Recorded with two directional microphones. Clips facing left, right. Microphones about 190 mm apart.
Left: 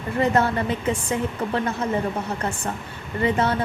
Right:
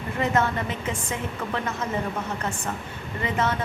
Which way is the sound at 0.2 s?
35° left (ahead or behind).